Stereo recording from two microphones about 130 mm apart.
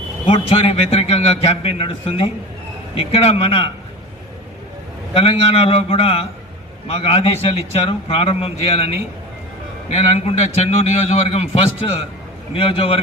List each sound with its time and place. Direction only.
0.3 s a man's voice: 45° left (ahead or behind)
5.1 s a man's voice: 50° left (ahead or behind)